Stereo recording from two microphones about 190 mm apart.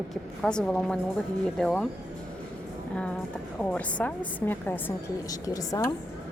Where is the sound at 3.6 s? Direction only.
10° left (ahead or behind).